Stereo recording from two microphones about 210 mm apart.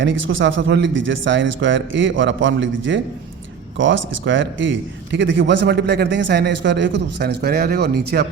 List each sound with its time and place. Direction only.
0.0 s a man's voice: 60° right (ahead or behind)